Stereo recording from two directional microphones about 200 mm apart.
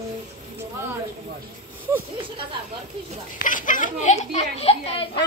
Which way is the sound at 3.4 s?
40° left (ahead or behind).